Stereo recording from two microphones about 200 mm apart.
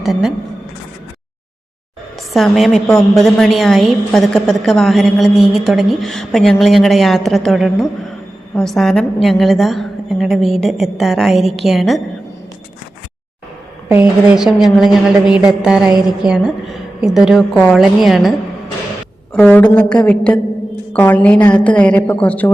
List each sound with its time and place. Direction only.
0.0 s a woman's voice: centre (ahead or behind)
2.3 s a woman's voice: centre (ahead or behind)
13.8 s a woman's voice: 10° right (ahead or behind); by 22.5 s 10° left (ahead or behind)